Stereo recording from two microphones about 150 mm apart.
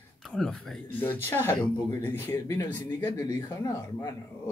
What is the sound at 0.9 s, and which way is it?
Speech, 15° left (ahead or behind).